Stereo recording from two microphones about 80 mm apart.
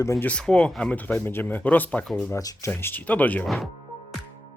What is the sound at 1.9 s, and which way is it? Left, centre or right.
Speech, centre.